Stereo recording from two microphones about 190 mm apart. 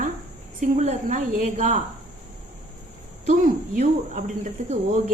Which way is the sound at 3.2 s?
40° right (ahead or behind).